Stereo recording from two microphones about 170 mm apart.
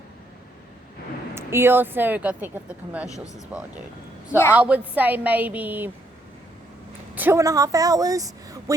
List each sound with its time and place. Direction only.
1.4 s speech: 15° right (ahead or behind)
7.2 s speech: 15° right (ahead or behind)